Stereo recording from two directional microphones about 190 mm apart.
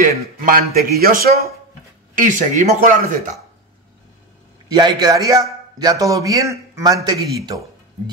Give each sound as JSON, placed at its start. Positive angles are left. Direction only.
{"t": 0.5, "sound": "speech", "side_deg": -50}
{"t": 4.6, "sound": "a man's voice", "side_deg": -20}